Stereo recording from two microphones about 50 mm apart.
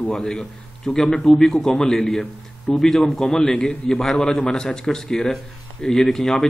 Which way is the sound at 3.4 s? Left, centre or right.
Centre.